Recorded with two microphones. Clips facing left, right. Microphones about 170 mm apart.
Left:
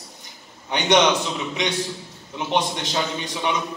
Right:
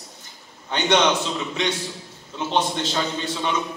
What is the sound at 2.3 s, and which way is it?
A man's voice, 15° left (ahead or behind).